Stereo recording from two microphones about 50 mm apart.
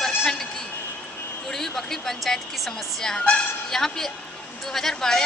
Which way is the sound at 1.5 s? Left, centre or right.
Centre.